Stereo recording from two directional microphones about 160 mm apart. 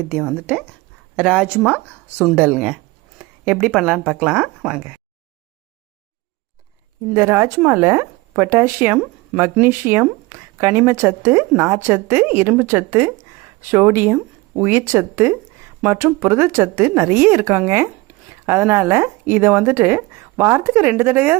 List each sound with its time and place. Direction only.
0.1 s speech: 5° right (ahead or behind)
7.1 s speech: 15° right (ahead or behind)